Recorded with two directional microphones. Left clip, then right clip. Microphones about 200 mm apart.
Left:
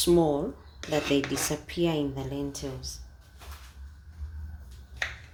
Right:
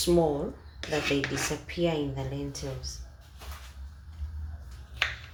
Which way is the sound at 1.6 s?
55° left (ahead or behind).